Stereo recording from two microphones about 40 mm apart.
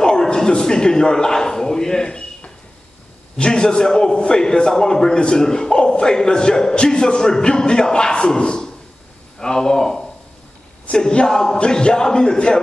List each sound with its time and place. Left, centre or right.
0.0 s a man's voice: centre